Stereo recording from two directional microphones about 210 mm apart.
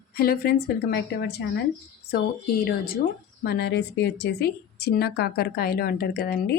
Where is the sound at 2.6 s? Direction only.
45° left (ahead or behind).